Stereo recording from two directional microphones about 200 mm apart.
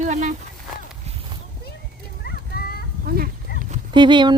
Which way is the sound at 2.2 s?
50° left (ahead or behind).